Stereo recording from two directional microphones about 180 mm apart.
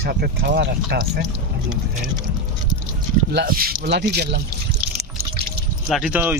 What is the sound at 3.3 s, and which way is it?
Speech, 60° right (ahead or behind).